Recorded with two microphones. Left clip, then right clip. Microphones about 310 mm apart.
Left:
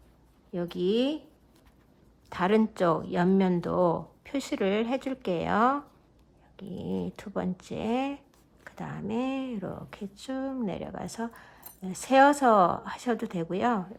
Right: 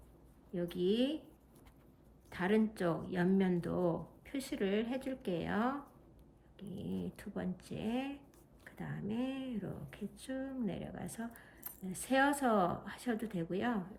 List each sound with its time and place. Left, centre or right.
0.5 s speech: centre
2.3 s speech: centre
6.6 s a sound: centre
7.2 s speech: centre